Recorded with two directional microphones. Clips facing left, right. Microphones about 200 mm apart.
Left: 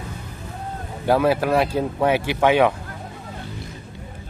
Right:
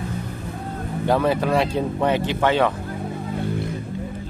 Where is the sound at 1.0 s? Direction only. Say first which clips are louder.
Left 2 dB; 5° left (ahead or behind).